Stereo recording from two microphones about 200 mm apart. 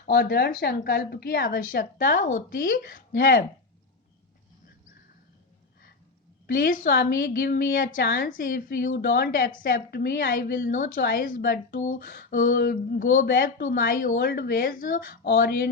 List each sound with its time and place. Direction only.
0.0 s a woman's voice: 50° left (ahead or behind)
6.5 s a woman's voice: 45° left (ahead or behind)